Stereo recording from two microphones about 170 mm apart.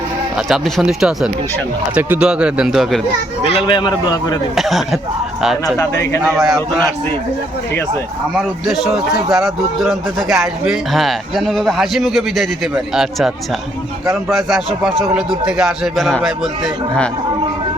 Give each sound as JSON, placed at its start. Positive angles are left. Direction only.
{"t": 0.3, "sound": "a man's voice", "side_deg": 0}
{"t": 3.4, "sound": "speech", "side_deg": 30}
{"t": 4.5, "sound": "a man's voice", "side_deg": 0}
{"t": 5.7, "sound": "a man's voice", "side_deg": 15}
{"t": 6.3, "sound": "a man's voice", "side_deg": 0}
{"t": 8.4, "sound": "a man's voice", "side_deg": 0}